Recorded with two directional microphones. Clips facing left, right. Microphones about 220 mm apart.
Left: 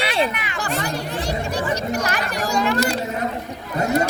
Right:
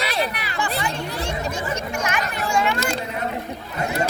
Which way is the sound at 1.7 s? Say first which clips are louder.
Left 3 dB; 35° left (ahead or behind).